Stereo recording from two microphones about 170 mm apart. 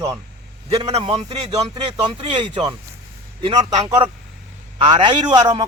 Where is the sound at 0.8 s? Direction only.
35° right (ahead or behind).